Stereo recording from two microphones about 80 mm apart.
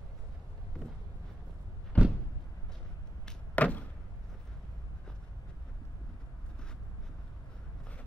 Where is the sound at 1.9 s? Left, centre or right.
Centre.